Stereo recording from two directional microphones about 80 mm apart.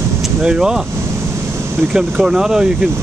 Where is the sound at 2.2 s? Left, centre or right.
Centre.